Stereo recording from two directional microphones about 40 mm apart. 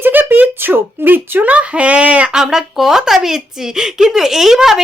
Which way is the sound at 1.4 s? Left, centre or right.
Right.